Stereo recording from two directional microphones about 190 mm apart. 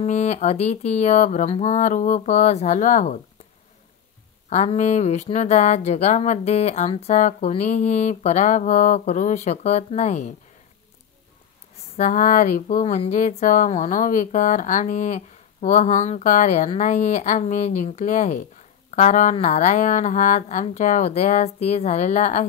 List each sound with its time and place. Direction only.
0.0 s speech: 40° left (ahead or behind)
4.5 s speech: 40° left (ahead or behind)
12.0 s speech: 45° left (ahead or behind)